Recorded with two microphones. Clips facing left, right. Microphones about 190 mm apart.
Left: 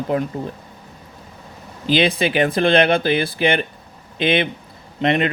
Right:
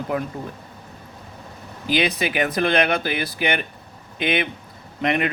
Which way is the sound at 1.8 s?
30° left (ahead or behind).